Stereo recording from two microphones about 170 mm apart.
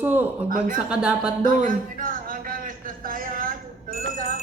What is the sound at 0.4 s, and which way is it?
Speech, 55° right (ahead or behind).